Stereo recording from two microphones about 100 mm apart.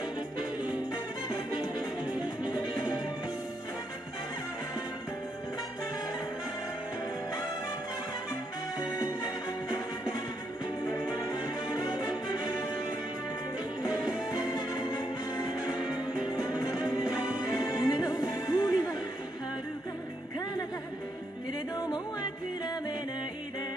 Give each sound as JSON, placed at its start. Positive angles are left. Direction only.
{"t": 2.4, "sound": "music", "side_deg": 45}
{"t": 11.7, "sound": "music", "side_deg": 45}
{"t": 14.4, "sound": "music", "side_deg": 45}
{"t": 16.6, "sound": "music", "side_deg": -10}
{"t": 17.7, "sound": "music", "side_deg": 45}
{"t": 21.7, "sound": "music", "side_deg": 45}